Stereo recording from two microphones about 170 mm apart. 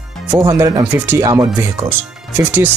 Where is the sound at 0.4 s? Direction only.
20° right (ahead or behind).